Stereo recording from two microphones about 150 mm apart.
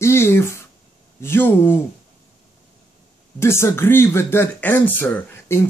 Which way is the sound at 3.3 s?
15° left (ahead or behind).